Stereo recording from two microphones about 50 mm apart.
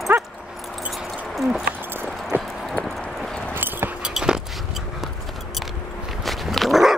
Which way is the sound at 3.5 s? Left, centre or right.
Right.